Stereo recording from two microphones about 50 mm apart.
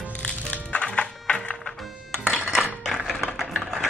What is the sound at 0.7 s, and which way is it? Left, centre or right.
Music, left.